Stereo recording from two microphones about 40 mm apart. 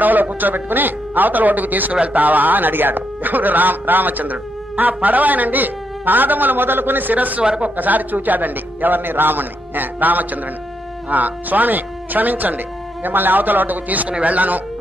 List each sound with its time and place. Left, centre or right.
0.0 s speech: right